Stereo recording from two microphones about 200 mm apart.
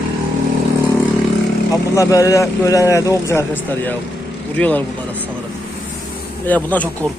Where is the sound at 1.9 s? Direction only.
15° left (ahead or behind).